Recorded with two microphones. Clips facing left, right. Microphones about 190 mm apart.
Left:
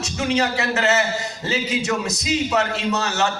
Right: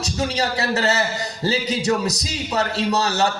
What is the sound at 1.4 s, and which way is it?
A man's voice, 35° right (ahead or behind).